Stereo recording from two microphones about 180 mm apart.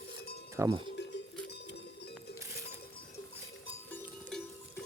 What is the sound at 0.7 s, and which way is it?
Speech, 30° right (ahead or behind).